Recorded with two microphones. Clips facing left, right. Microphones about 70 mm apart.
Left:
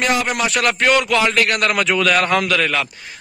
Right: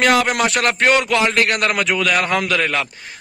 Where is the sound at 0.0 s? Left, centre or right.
Right.